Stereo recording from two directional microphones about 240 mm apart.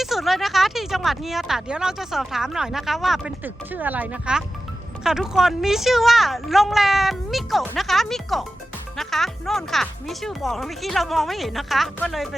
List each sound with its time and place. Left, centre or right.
0.0 s speech: centre